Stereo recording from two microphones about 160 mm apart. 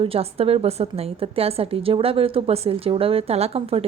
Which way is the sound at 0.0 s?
35° right (ahead or behind).